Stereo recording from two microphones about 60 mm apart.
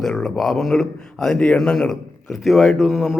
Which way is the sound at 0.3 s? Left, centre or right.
Centre.